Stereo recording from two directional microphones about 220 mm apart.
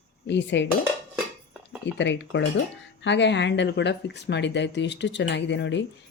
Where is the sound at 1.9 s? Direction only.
55° left (ahead or behind).